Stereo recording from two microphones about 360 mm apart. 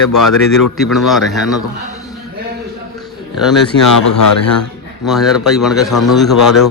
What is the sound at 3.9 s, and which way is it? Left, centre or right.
Speech, left.